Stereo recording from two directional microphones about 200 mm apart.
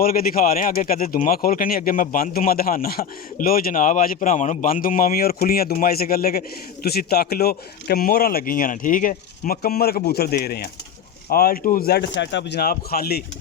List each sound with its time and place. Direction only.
0.0 s speech: 45° left (ahead or behind)